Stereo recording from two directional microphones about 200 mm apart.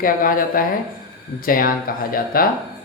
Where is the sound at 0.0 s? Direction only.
45° left (ahead or behind).